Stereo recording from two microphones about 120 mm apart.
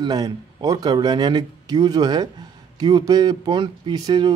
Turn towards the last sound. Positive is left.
turn(degrees=-35)  # may be behind; listen again after turning